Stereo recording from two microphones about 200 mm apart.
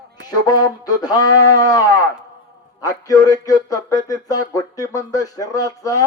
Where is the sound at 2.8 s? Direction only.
15° left (ahead or behind).